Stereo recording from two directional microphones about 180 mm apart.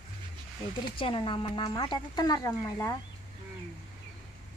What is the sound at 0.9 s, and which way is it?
Speech, 30° left (ahead or behind).